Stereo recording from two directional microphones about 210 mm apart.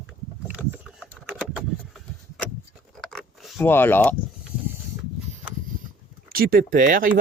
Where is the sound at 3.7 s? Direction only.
10° left (ahead or behind).